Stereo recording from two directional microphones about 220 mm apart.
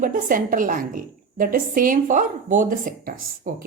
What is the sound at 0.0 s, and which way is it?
Speech, 40° right (ahead or behind).